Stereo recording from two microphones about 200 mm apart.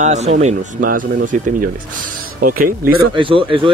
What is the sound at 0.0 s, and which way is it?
Speech, 35° right (ahead or behind).